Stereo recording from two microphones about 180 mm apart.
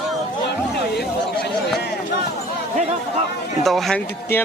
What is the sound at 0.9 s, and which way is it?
Chatter, 65° left (ahead or behind).